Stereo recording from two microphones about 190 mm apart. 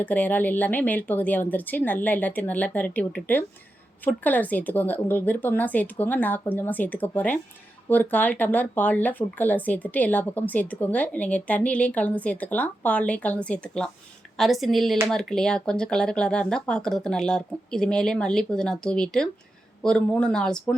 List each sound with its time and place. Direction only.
0.0 s speech: 10° left (ahead or behind)